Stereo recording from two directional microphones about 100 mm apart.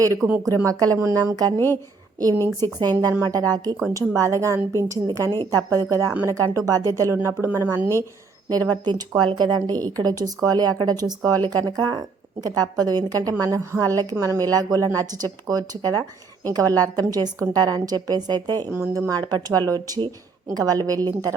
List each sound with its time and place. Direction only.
0.2 s speech: 30° right (ahead or behind)
1.5 s a woman's voice: 25° left (ahead or behind)
2.8 s speech: 45° right (ahead or behind); by 7.9 s 25° right (ahead or behind)
8.4 s a woman's voice: 45° right (ahead or behind)
18.7 s speech: 20° right (ahead or behind)
19.0 s speech: 40° right (ahead or behind)